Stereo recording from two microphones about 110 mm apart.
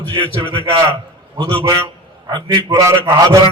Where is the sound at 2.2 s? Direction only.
40° right (ahead or behind).